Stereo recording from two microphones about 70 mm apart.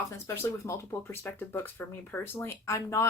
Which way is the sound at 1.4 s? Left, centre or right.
Left.